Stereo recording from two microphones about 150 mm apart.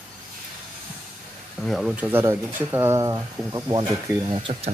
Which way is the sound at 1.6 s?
5° right (ahead or behind).